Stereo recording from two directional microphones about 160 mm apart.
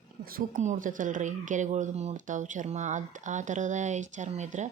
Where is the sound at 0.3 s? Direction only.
50° right (ahead or behind).